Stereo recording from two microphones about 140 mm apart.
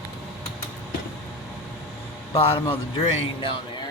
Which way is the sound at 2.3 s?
45° left (ahead or behind).